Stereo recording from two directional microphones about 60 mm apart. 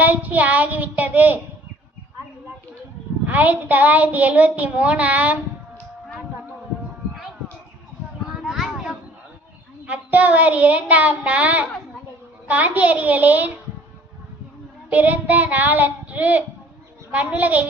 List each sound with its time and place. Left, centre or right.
0.0 s a child's voice: right
3.2 s a child's voice: right
8.3 s a sound: centre
9.8 s a child's voice: right
14.8 s a child's voice: right